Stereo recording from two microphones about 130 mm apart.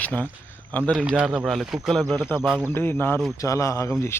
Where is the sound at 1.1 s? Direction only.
10° right (ahead or behind).